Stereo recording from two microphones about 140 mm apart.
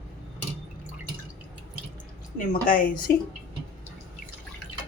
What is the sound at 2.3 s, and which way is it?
Speech, 90° left.